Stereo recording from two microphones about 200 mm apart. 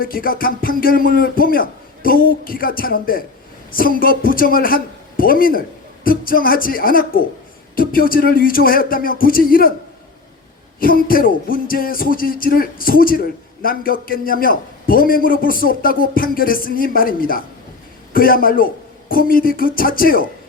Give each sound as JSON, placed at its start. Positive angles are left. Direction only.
{"t": 0.0, "sound": "music", "side_deg": 45}
{"t": 10.8, "sound": "music", "side_deg": 45}